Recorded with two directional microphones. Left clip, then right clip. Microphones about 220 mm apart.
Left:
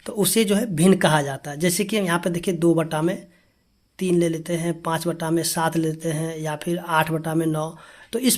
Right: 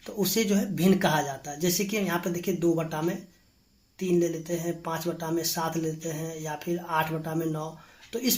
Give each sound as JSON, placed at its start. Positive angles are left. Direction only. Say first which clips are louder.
{"t": 0.0, "sound": "speech", "louder": "left 6 dB", "side_deg": 45}